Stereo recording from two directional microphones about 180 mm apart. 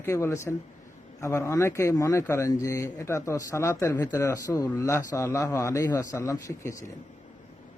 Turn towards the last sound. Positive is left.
turn(degrees=15)  # may be behind; listen again after turning